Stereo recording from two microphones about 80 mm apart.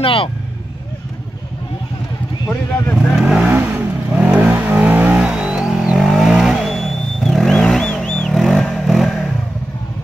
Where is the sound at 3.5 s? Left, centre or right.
Right; by 9.3 s centre.